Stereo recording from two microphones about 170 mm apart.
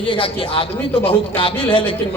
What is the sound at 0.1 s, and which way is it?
Speech, 30° left (ahead or behind).